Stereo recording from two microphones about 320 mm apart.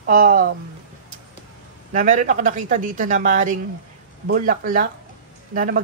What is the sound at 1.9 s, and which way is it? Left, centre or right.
A woman's voice, right.